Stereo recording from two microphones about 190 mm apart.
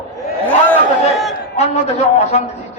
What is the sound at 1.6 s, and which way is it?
Speech, 35° left (ahead or behind).